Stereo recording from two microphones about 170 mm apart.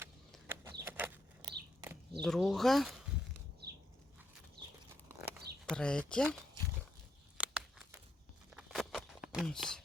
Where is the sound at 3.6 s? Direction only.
70° right (ahead or behind).